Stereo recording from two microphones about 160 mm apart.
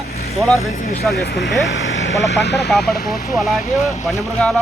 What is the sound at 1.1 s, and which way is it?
Speech, 80° left.